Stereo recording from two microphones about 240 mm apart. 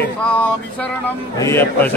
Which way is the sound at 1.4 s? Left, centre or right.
Centre.